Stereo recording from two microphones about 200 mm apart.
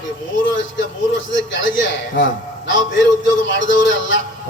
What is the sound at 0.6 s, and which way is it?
A man's voice, 65° left (ahead or behind).